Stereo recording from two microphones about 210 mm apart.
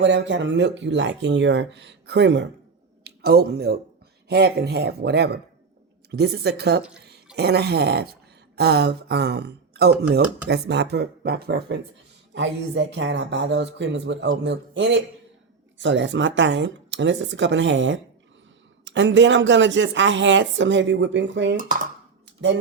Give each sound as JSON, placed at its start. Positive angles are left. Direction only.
{"t": 0.0, "sound": "speech", "side_deg": -60}